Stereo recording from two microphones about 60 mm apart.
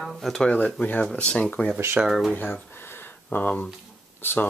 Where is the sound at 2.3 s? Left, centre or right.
Left.